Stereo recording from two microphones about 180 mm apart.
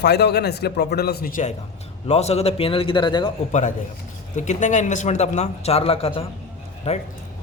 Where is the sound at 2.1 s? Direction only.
35° left (ahead or behind).